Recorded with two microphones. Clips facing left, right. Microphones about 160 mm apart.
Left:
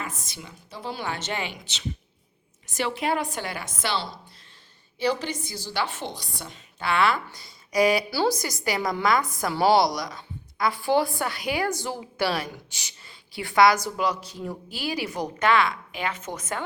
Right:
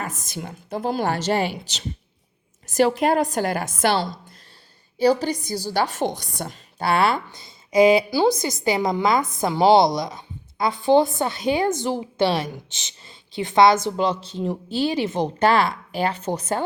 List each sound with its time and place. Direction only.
0.3 s a woman's voice: 50° right (ahead or behind)
7.3 s a woman's voice: 25° right (ahead or behind)